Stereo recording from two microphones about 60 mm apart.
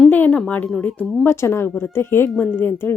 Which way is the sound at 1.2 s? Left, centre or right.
Left.